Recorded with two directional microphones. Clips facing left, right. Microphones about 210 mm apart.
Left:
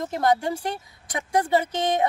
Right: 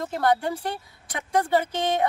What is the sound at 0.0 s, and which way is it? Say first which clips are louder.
A woman's voice: left 1 dB; 15° left (ahead or behind).